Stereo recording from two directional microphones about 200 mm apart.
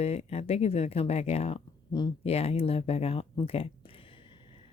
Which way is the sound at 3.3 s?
25° left (ahead or behind).